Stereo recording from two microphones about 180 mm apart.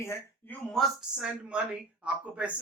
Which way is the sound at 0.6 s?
Centre (ahead or behind).